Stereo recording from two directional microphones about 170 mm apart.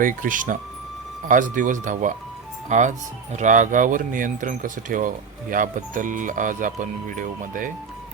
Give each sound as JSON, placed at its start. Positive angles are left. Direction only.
{"t": 0.0, "sound": "speech", "side_deg": -50}